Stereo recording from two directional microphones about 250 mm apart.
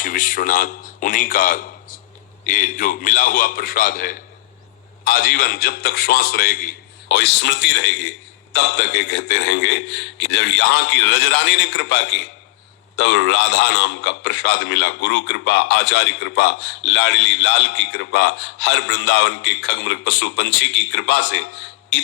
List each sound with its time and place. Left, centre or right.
0.0 s a man's voice: left